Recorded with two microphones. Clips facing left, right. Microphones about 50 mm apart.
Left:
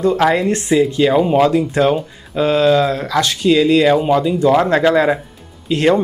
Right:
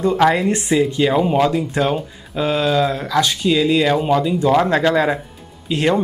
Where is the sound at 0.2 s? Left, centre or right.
Centre.